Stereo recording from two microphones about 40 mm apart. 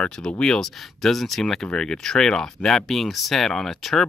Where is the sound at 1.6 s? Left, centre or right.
Centre.